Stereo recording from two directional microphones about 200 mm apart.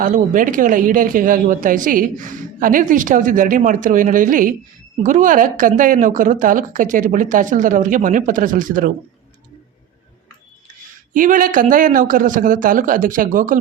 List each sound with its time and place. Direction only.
0.0 s speech: 40° right (ahead or behind)
11.1 s a man's voice: 40° right (ahead or behind)